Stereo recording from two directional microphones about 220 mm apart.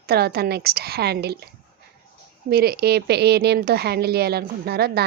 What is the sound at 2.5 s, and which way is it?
Speech, 45° right (ahead or behind).